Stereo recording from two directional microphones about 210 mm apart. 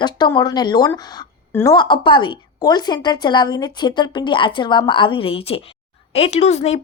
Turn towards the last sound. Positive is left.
turn(degrees=30)  # may be behind; listen again after turning